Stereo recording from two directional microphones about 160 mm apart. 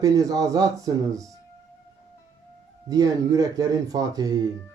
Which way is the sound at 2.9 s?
20° right (ahead or behind).